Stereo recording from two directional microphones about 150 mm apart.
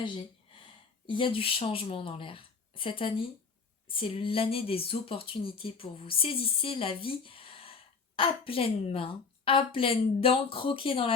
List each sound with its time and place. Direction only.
1.0 s speech: 35° left (ahead or behind)